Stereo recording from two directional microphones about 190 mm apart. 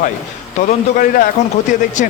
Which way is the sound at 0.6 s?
35° left (ahead or behind).